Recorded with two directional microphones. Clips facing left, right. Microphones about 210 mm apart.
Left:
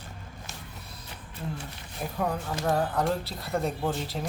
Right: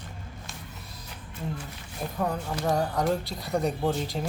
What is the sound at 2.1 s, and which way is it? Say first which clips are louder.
Speech: even; centre (ahead or behind).